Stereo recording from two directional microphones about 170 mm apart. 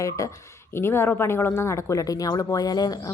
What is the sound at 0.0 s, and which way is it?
Speech, 20° left (ahead or behind).